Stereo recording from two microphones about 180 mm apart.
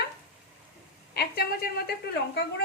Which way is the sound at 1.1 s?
60° left (ahead or behind).